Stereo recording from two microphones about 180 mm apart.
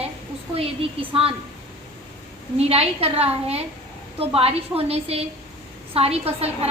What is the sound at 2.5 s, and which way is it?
A woman's voice, 35° right (ahead or behind).